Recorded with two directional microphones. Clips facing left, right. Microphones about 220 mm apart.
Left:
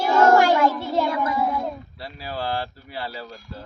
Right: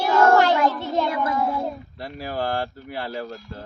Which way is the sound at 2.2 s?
50° right (ahead or behind).